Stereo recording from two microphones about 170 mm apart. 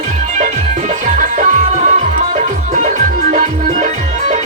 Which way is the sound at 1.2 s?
50° right (ahead or behind).